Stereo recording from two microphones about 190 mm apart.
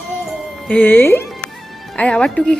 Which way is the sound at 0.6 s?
5° left (ahead or behind).